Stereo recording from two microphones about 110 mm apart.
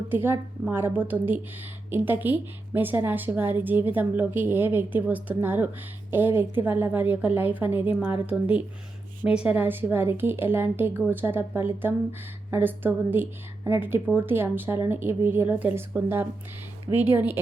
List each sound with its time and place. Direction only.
0.1 s a woman's voice: 20° right (ahead or behind)